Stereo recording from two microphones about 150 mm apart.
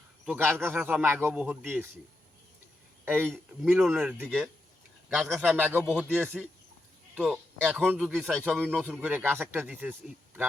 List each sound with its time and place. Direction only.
0.3 s a man's voice: 15° right (ahead or behind)
3.0 s speech: 15° right (ahead or behind)
3.2 s speech: 5° left (ahead or behind)
3.8 s a man's voice: 10° right (ahead or behind)
7.8 s speech: 5° left (ahead or behind)
8.4 s a man's voice: 10° right (ahead or behind)